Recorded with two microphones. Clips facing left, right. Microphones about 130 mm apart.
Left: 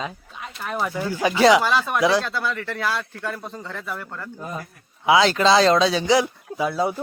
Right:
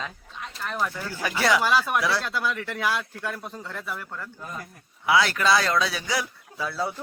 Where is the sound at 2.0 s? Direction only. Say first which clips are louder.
Left 7 dB; 15° left (ahead or behind).